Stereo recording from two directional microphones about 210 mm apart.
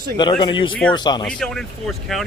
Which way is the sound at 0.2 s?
20° left (ahead or behind).